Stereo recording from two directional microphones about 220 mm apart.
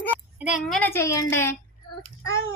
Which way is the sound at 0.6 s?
5° left (ahead or behind).